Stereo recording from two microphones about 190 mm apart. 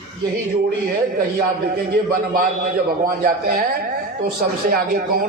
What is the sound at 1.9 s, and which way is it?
A man's voice, 50° right (ahead or behind).